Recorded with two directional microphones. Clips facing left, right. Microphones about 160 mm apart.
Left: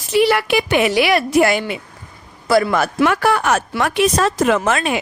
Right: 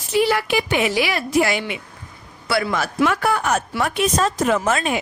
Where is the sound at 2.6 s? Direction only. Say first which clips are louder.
Left 4 dB; 60° left (ahead or behind); by 5.0 s 85° left.